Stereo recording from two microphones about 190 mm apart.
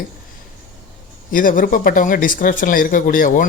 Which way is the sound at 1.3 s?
45° left (ahead or behind).